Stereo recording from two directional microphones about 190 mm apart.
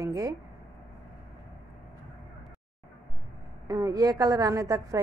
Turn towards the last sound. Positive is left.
turn(degrees=-20)  # may be behind; listen again after turning